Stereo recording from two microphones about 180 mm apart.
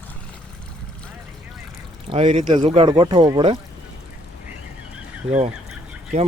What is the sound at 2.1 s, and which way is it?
Speech, 30° right (ahead or behind).